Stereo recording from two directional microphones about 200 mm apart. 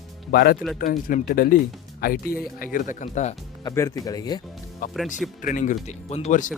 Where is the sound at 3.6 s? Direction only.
15° left (ahead or behind).